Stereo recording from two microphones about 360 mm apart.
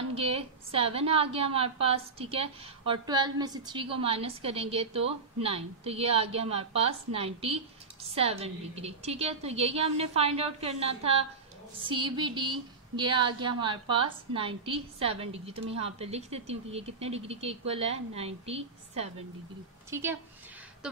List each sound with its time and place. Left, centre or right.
0.1 s a woman's voice: centre